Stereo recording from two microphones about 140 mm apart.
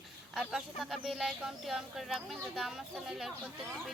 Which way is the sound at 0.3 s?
Centre (ahead or behind).